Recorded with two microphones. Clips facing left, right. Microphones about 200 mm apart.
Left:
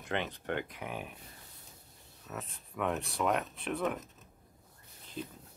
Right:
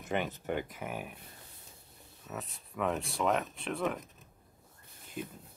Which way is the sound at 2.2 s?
Centre (ahead or behind).